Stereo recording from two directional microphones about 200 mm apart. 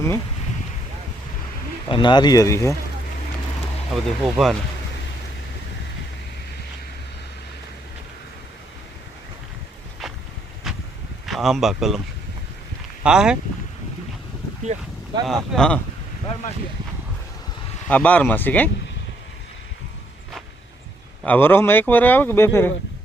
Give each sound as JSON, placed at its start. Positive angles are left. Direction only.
{"t": 1.9, "sound": "speech", "side_deg": 25}
{"t": 4.0, "sound": "speech", "side_deg": 0}
{"t": 10.7, "sound": "vehicle", "side_deg": 0}
{"t": 11.3, "sound": "speech", "side_deg": 0}
{"t": 13.0, "sound": "speech", "side_deg": -5}
{"t": 15.3, "sound": "speech", "side_deg": 5}
{"t": 17.8, "sound": "speech", "side_deg": 10}
{"t": 21.2, "sound": "speech", "side_deg": 10}